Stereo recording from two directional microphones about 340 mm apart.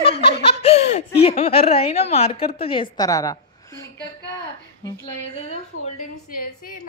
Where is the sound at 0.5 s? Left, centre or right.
Centre.